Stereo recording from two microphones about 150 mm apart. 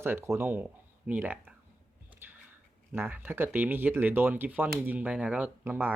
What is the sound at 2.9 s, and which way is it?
Speech, 15° right (ahead or behind).